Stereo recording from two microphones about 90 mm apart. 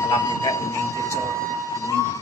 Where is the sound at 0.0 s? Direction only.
35° left (ahead or behind).